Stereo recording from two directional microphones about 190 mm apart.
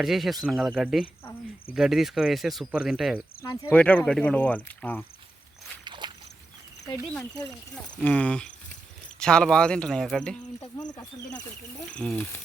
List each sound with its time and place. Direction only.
0.0 s speech: centre (ahead or behind)
3.4 s speech: 20° left (ahead or behind)
3.8 s speech: 5° left (ahead or behind)
5.8 s a sound: 25° right (ahead or behind)
8.0 s speech: 5° left (ahead or behind)
10.8 s speech: 20° left (ahead or behind)
11.8 s speech: 5° left (ahead or behind)